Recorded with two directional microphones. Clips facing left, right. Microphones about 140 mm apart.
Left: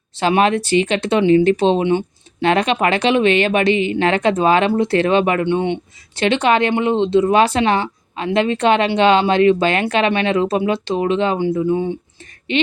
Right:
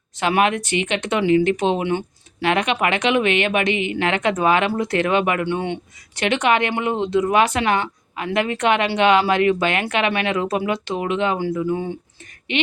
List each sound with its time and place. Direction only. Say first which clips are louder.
0.2 s speech: left 3 dB; 30° left (ahead or behind)